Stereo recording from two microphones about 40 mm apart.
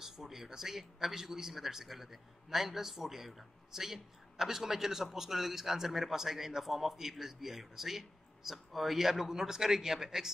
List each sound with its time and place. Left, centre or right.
0.0 s speech: centre